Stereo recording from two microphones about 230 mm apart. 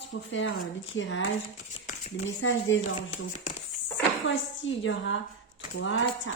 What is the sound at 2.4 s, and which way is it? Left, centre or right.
Speech, left.